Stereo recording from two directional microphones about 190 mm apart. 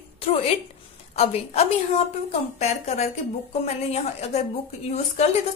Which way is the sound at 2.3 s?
35° left (ahead or behind).